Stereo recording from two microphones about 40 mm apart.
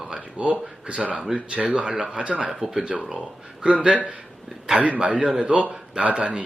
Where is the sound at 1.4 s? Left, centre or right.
Right.